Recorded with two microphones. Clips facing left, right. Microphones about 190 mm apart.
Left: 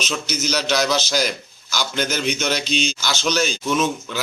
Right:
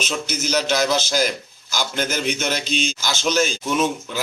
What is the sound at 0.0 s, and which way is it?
A man's voice, 50° right (ahead or behind).